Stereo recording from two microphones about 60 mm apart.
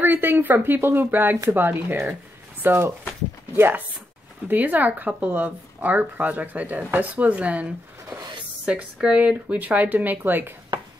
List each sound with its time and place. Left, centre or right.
0.0 s speech: right
4.5 s a woman's voice: right